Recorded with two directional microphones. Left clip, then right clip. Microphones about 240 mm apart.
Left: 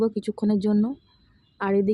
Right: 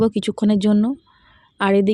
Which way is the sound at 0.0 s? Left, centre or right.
Right.